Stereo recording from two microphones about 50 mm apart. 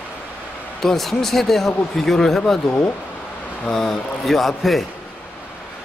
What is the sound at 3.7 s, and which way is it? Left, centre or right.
A man's voice, centre.